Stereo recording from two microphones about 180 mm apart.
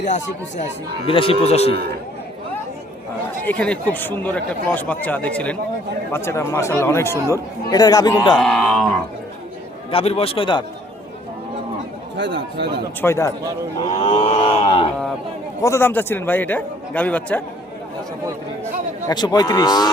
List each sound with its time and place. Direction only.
0.0 s speech: 40° left (ahead or behind)
3.4 s a man's voice: 5° left (ahead or behind); by 8.4 s 20° left (ahead or behind)
8.4 s a sound: centre (ahead or behind)
9.9 s speech: 35° left (ahead or behind)
12.1 s speech: 75° right (ahead or behind)
13.0 s speech: 15° left (ahead or behind)
14.0 s a man's voice: 30° left (ahead or behind)
15.6 s speech: 15° left (ahead or behind)
19.0 s a man's voice: 25° left (ahead or behind)